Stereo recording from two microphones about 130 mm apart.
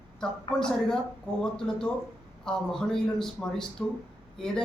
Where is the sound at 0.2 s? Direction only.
5° left (ahead or behind).